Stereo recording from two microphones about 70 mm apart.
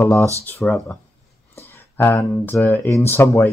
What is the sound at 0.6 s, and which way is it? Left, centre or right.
Speech, centre.